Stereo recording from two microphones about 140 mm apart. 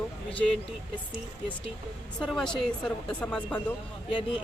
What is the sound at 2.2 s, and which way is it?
Speech, 5° left (ahead or behind).